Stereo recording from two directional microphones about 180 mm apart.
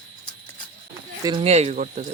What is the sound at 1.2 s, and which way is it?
Speech, 25° right (ahead or behind).